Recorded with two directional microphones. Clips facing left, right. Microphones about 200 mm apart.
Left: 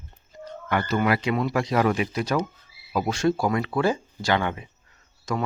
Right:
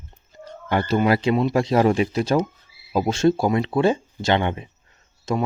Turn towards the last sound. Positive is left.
turn(degrees=-25)  # may be behind; listen again after turning